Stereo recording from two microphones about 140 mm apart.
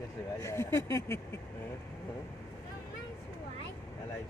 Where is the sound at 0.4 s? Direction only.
20° left (ahead or behind).